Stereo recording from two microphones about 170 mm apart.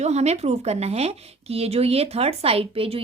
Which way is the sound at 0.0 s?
40° right (ahead or behind).